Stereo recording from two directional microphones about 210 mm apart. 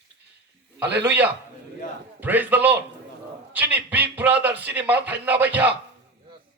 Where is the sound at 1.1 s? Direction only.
10° right (ahead or behind).